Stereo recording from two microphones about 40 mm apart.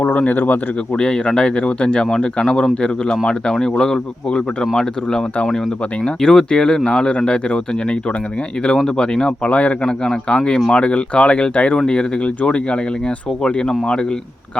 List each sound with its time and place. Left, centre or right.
0.0 s speech: left
0.9 s speech: left
9.0 s speech: left
9.5 s speech: left
9.8 s speech: centre